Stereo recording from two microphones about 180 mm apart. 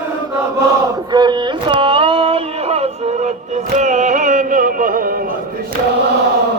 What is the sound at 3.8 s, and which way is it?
Music, 40° right (ahead or behind).